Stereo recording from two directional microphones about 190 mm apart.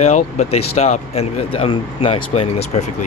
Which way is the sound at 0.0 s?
35° left (ahead or behind).